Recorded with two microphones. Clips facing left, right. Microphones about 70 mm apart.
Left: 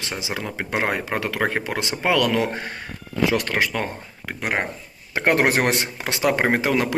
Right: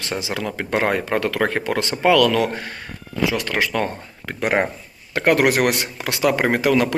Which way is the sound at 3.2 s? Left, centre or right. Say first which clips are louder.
Left 1 dB; left.